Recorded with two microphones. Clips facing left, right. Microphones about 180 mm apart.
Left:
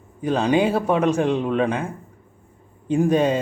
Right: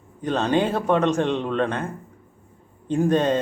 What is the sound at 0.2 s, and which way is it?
A man's voice, 10° left (ahead or behind).